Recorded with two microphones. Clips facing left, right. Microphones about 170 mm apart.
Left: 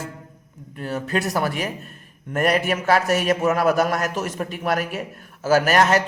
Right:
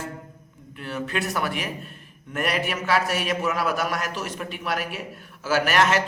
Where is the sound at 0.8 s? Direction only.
40° left (ahead or behind).